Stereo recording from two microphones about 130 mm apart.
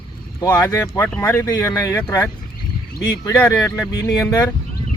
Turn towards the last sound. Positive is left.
turn(degrees=25)  # may be behind; listen again after turning